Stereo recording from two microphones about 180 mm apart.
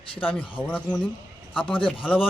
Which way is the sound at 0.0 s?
30° left (ahead or behind).